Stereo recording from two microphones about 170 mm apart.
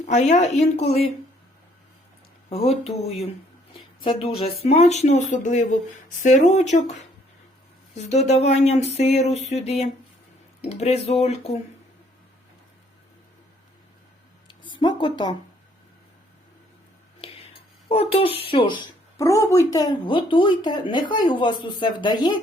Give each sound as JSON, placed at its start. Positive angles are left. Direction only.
{"t": 0.0, "sound": "speech", "side_deg": 40}
{"t": 2.5, "sound": "speech", "side_deg": 35}
{"t": 7.9, "sound": "speech", "side_deg": 40}
{"t": 14.4, "sound": "a sound", "side_deg": 30}
{"t": 17.2, "sound": "whispering", "side_deg": 35}
{"t": 17.8, "sound": "speech", "side_deg": 35}
{"t": 19.2, "sound": "speech", "side_deg": 20}